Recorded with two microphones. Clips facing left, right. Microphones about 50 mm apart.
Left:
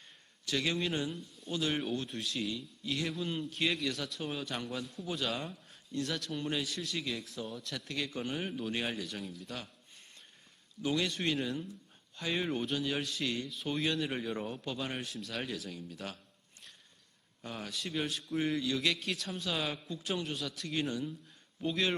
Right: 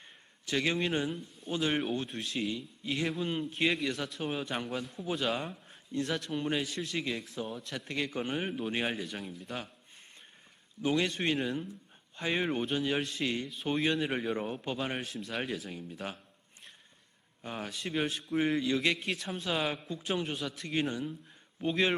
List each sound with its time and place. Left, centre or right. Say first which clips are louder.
0.4 s speech: right 3 dB; right
3.1 s a man's voice: right 3 dB; centre
3.5 s speech: right 3 dB; centre
5.6 s a sound: right 3 dB; right
6.1 s a man's voice: right 3 dB; centre
10.8 s speech: right 3 dB; right
11.3 s a man's voice: right 2 dB; centre
12.1 s a man's voice: right 3 dB; right
14.0 s speech: right 3 dB; right
17.4 s a man's voice: right 2 dB; right